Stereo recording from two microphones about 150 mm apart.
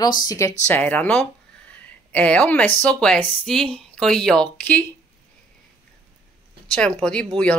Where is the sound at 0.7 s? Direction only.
10° left (ahead or behind).